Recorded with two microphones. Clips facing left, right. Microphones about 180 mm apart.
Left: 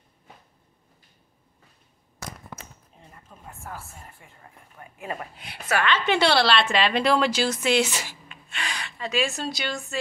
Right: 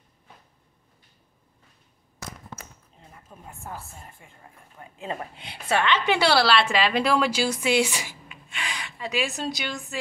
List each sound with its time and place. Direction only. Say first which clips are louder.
3.3 s a woman's voice: right 1 dB; 15° right (ahead or behind)